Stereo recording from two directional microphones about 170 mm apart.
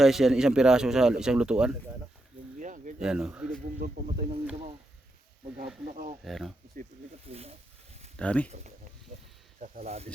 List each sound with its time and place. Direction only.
0.0 s speech: centre (ahead or behind)
2.6 s a sound: 50° right (ahead or behind)
3.0 s speech: 5° right (ahead or behind)
3.8 s speech: 45° right (ahead or behind)
5.9 s speech: 45° right (ahead or behind)
6.2 s speech: centre (ahead or behind)
7.3 s speech: 35° right (ahead or behind)
8.1 s speech: 5° left (ahead or behind)
9.8 s speech: 40° right (ahead or behind)